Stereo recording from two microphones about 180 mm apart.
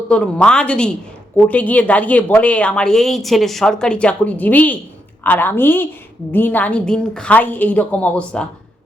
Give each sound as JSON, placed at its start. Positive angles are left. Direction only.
{"t": 0.1, "sound": "a woman's voice", "side_deg": 5}